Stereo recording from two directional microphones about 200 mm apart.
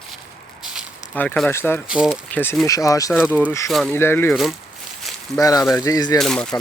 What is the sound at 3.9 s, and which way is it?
Speech, 10° left (ahead or behind).